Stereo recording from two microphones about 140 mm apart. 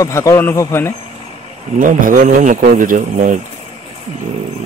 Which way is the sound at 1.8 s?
75° right (ahead or behind).